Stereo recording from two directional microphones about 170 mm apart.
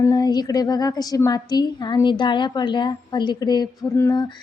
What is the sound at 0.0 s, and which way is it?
A woman's voice, 25° left (ahead or behind).